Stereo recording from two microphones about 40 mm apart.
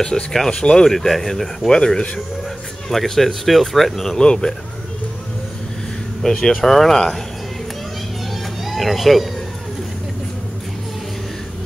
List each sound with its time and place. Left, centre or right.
0.0 s speech: centre
0.9 s speech: centre
1.7 s speech: centre
2.9 s speech: centre
6.2 s speech: centre
6.5 s speech: centre
8.6 s speech: centre